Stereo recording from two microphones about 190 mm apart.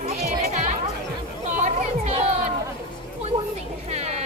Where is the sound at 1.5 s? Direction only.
35° right (ahead or behind).